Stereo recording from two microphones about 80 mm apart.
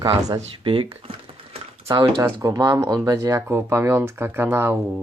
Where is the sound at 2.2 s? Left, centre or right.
Right.